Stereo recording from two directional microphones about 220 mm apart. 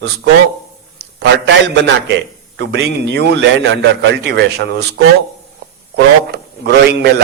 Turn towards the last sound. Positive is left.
turn(degrees=-50)  # may be behind; listen again after turning